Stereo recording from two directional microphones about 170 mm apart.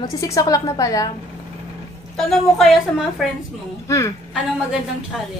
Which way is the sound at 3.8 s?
15° left (ahead or behind).